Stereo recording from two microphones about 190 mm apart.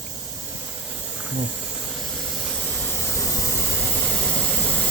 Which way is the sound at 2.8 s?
15° left (ahead or behind).